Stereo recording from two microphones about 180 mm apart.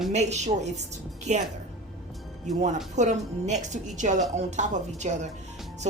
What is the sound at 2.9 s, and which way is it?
A woman's voice, 40° right (ahead or behind).